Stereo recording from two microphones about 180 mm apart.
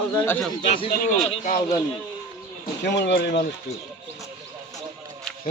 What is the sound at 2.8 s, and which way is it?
Speech, 75° left (ahead or behind).